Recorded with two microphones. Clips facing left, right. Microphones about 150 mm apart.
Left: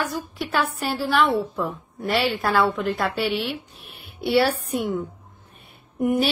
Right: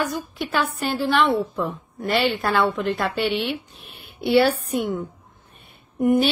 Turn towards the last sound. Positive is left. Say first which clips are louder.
# right 3 dB
turn(degrees=5)  # may be behind; listen again after turning